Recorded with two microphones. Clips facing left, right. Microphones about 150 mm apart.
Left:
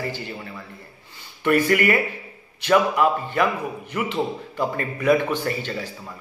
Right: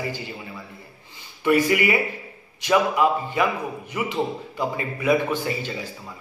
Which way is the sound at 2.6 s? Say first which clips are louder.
Left 1 dB; 10° right (ahead or behind).